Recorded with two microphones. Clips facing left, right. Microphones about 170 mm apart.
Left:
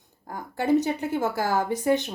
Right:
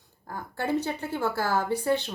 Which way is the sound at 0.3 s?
15° left (ahead or behind).